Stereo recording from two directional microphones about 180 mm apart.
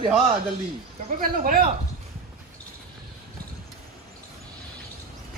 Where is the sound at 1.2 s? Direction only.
55° right (ahead or behind).